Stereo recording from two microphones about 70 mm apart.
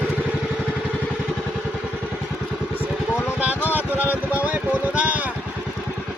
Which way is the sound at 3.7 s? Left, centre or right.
Right.